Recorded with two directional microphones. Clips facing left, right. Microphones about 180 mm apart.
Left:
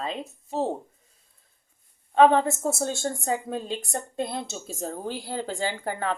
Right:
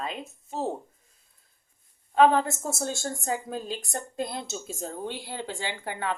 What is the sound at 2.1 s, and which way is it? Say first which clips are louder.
A woman's voice: left 2 dB; 30° left (ahead or behind).